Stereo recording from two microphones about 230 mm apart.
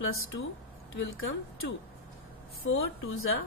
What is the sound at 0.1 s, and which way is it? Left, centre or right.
A woman's voice, left.